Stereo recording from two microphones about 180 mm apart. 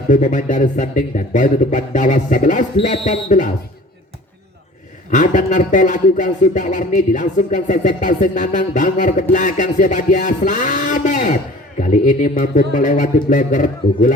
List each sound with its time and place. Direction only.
0.1 s speech: 45° left (ahead or behind)
5.1 s speech: 45° left (ahead or behind)